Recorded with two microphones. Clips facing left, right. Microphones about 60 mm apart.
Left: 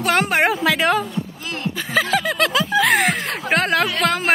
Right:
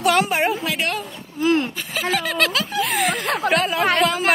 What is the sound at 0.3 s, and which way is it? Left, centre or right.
Speech, left.